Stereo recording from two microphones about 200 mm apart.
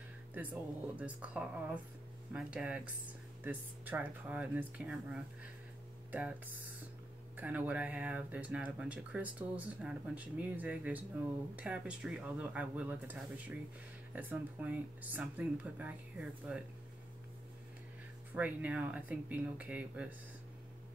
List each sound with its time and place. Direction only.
0.3 s speech: 10° right (ahead or behind)
18.3 s speech: 5° right (ahead or behind)